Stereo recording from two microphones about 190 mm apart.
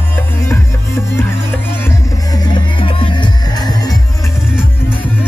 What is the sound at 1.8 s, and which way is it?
Music, 15° left (ahead or behind).